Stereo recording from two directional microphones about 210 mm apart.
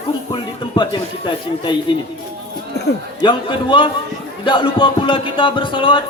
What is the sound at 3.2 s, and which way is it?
Speech, 25° left (ahead or behind).